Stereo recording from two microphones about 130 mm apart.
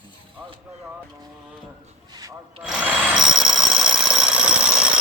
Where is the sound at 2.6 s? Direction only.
5° right (ahead or behind).